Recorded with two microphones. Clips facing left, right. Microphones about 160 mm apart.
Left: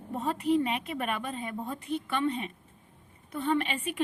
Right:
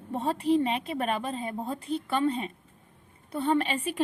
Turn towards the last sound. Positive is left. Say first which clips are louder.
# right 3 dB
turn(degrees=-35)  # may be behind; listen again after turning